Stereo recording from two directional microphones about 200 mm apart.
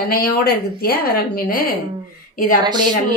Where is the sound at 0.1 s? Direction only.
50° left (ahead or behind).